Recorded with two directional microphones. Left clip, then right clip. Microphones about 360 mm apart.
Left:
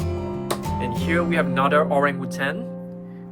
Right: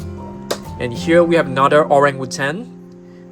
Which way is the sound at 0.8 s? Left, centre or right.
Centre.